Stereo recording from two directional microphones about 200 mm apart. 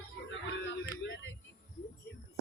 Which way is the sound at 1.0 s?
65° left (ahead or behind).